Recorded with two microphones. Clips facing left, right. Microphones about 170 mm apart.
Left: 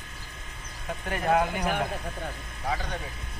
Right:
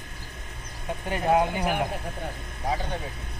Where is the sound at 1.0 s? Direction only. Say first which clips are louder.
Right 2 dB; 20° right (ahead or behind).